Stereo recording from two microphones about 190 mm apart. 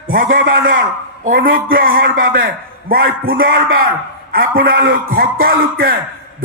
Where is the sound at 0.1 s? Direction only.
50° right (ahead or behind).